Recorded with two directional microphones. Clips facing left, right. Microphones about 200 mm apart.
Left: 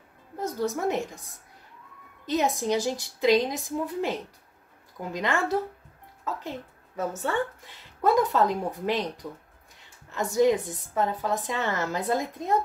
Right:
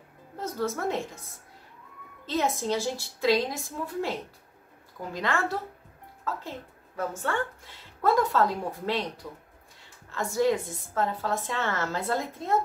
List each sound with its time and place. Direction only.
0.4 s speech: 15° left (ahead or behind)
2.2 s speech: 15° left (ahead or behind)
5.1 s speech: 20° left (ahead or behind)
8.0 s speech: 20° left (ahead or behind)